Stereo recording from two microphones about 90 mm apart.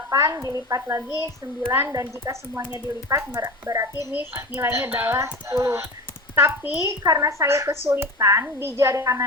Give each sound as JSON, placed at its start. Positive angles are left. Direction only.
{"t": 0.1, "sound": "a woman's voice", "side_deg": -35}
{"t": 1.6, "sound": "a woman's voice", "side_deg": -25}
{"t": 1.9, "sound": "a woman's voice", "side_deg": -35}
{"t": 2.7, "sound": "a woman's voice", "side_deg": -40}
{"t": 4.1, "sound": "a woman's voice", "side_deg": -25}
{"t": 6.7, "sound": "a woman's voice", "side_deg": -40}